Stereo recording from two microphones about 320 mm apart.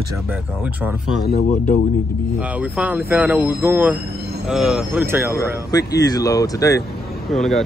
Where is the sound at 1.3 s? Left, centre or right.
Left.